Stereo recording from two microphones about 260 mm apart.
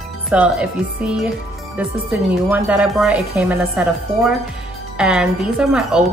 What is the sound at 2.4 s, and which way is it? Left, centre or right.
A woman's voice, centre.